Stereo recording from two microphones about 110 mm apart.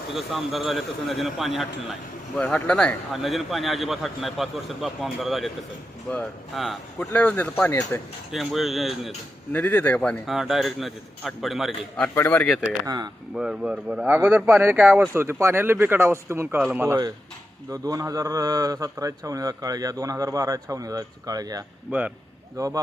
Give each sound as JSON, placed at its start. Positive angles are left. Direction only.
{"t": 0.1, "sound": "a man's voice", "side_deg": 0}
{"t": 2.4, "sound": "speech", "side_deg": 10}
{"t": 3.1, "sound": "a man's voice", "side_deg": 0}
{"t": 6.1, "sound": "a man's voice", "side_deg": 10}
{"t": 7.1, "sound": "speech", "side_deg": 15}
{"t": 7.7, "sound": "speech", "side_deg": 30}
{"t": 8.3, "sound": "a man's voice", "side_deg": 0}
{"t": 9.5, "sound": "speech", "side_deg": 15}
{"t": 10.2, "sound": "a man's voice", "side_deg": -5}
{"t": 12.1, "sound": "speech", "side_deg": 20}
{"t": 12.8, "sound": "a man's voice", "side_deg": -35}
{"t": 13.3, "sound": "a man's voice", "side_deg": -5}
{"t": 21.9, "sound": "speech", "side_deg": -10}
{"t": 22.5, "sound": "a man's voice", "side_deg": -30}